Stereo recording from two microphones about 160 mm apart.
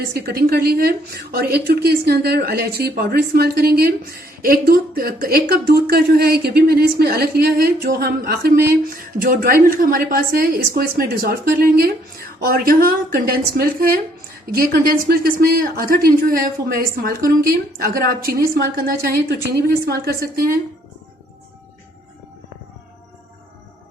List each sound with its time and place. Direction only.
0.1 s a woman's voice: 80° right